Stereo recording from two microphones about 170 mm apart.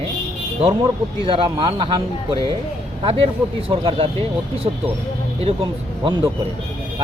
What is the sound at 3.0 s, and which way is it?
Speech, 35° right (ahead or behind).